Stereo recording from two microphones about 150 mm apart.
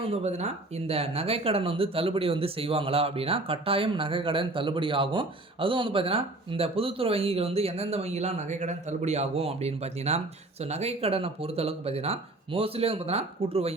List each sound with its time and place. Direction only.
0.0 s speech: 45° right (ahead or behind)